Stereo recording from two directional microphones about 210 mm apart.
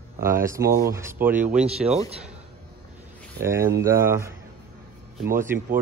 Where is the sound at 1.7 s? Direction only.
30° right (ahead or behind).